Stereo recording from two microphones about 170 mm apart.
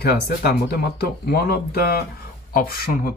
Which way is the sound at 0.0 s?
65° left (ahead or behind).